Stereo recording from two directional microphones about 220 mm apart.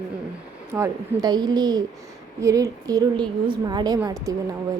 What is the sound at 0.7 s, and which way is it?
A woman's voice, 15° right (ahead or behind).